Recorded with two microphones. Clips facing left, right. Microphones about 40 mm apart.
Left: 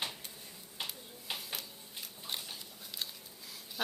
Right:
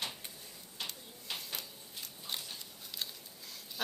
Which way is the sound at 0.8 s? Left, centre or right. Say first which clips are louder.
Left 1 dB; centre.